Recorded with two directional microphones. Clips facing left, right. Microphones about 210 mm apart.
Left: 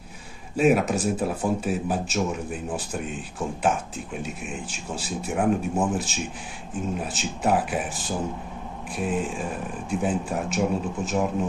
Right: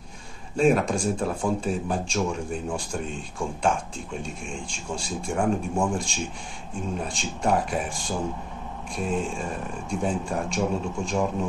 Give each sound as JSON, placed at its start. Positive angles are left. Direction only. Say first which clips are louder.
{"t": 0.6, "sound": "speech", "louder": "left 1 dB", "side_deg": 5}